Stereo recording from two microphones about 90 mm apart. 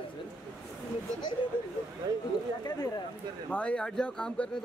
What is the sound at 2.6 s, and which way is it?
Speech, 40° left (ahead or behind).